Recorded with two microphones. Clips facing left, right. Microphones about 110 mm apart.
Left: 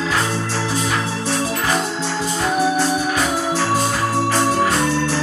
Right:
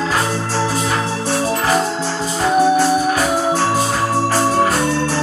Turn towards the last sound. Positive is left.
turn(degrees=-35)  # may be behind; listen again after turning